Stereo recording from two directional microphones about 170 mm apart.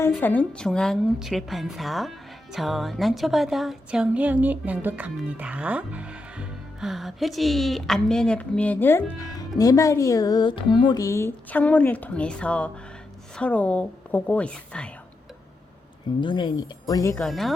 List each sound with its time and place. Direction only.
0.0 s a woman's voice: 10° left (ahead or behind)
16.2 s speech: 25° left (ahead or behind)
17.2 s a woman's voice: centre (ahead or behind)